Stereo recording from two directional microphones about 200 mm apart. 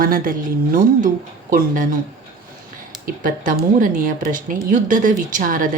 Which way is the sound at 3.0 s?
45° right (ahead or behind).